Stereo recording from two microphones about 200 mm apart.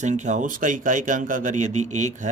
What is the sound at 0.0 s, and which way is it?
Speech, 35° right (ahead or behind).